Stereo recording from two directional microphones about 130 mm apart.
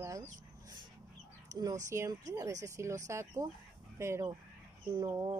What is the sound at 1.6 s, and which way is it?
Speech, 25° right (ahead or behind).